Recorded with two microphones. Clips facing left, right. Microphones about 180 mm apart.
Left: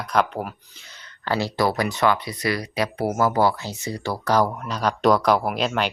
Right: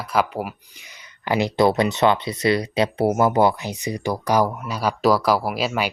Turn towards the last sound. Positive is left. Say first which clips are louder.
# even
turn(degrees=-5)  # may be behind; listen again after turning